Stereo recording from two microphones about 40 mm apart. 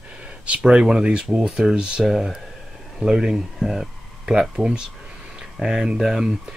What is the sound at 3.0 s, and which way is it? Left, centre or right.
Speech, centre.